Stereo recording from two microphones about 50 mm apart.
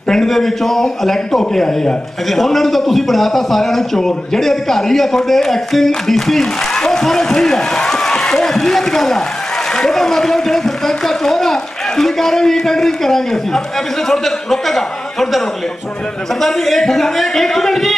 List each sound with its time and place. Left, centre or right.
0.1 s a man's voice: centre